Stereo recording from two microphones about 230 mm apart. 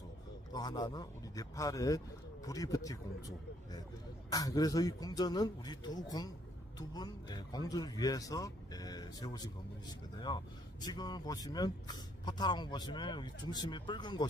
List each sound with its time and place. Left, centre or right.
0.5 s speech: centre